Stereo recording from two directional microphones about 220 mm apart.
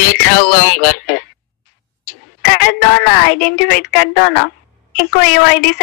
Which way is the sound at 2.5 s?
45° left (ahead or behind).